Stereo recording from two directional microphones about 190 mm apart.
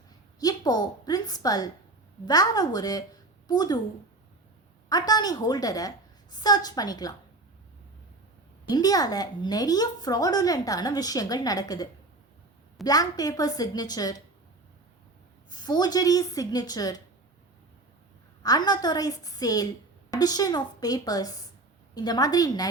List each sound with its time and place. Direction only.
0.3 s a woman's voice: 20° left (ahead or behind)
4.9 s a woman's voice: 20° left (ahead or behind)
8.7 s a woman's voice: 20° left (ahead or behind)
15.4 s a woman's voice: 20° left (ahead or behind)
18.4 s a woman's voice: 20° left (ahead or behind)